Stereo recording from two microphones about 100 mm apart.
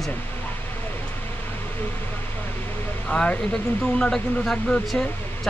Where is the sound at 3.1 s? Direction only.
10° left (ahead or behind).